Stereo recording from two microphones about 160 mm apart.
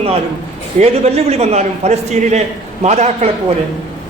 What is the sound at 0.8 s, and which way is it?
A man's voice, 40° right (ahead or behind).